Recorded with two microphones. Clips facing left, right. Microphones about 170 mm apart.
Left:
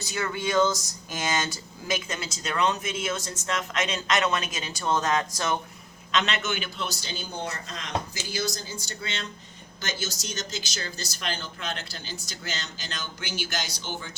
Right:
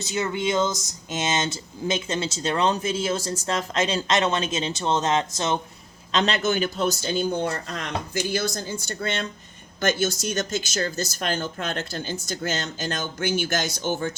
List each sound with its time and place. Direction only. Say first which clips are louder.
0.0 s speech: right 4 dB; 20° right (ahead or behind)
6.1 s speech: right 5 dB; 35° right (ahead or behind); by 14.1 s 50° right (ahead or behind)